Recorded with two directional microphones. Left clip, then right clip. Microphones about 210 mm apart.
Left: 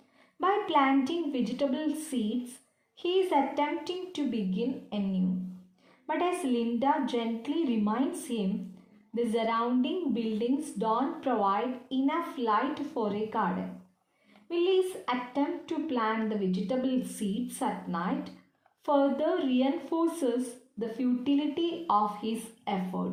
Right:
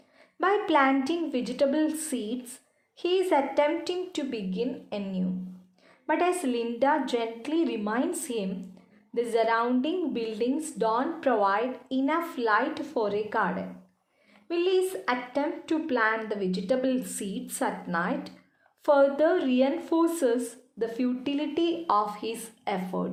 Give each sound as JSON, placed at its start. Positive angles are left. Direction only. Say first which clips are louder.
{"t": 0.3, "sound": "a woman's voice", "louder": "right 3 dB", "side_deg": -45}